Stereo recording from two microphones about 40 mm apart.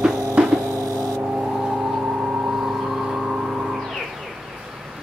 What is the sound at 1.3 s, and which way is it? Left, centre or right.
Vehicle, right.